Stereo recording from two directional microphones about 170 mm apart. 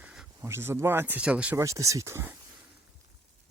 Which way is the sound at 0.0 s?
5° right (ahead or behind).